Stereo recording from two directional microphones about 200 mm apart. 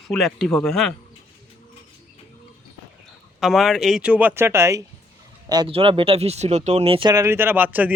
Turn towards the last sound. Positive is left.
turn(degrees=-10)  # may be behind; listen again after turning